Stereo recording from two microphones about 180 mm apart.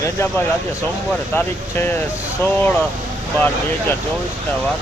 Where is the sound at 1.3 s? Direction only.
10° left (ahead or behind).